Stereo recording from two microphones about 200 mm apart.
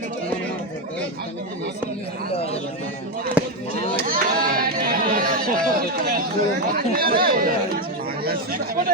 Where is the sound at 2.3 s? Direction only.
30° left (ahead or behind).